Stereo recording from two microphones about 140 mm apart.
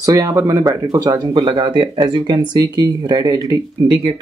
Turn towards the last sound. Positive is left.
turn(degrees=-30)  # may be behind; listen again after turning